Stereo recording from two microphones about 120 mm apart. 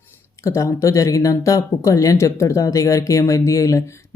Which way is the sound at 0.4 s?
25° left (ahead or behind).